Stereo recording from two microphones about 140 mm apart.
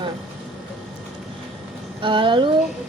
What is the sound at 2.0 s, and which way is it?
Speech, 35° right (ahead or behind).